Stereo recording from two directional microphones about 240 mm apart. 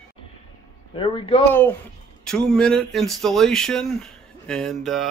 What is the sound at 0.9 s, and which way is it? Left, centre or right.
Speech, left.